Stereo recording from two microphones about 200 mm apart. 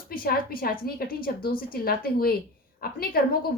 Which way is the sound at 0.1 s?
45° left (ahead or behind).